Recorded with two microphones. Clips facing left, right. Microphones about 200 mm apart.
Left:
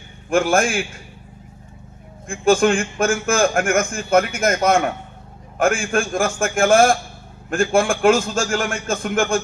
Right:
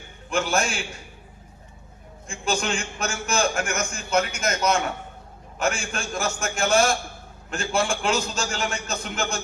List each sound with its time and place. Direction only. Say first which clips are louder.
0.3 s a man's voice: left 7 dB; 50° left (ahead or behind)
2.2 s a man's voice: left 11 dB; 50° left (ahead or behind)